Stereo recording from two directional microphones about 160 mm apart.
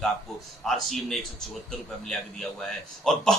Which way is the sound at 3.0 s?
5° left (ahead or behind).